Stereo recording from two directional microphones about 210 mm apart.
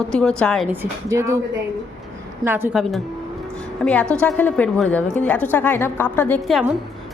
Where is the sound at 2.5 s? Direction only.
10° right (ahead or behind).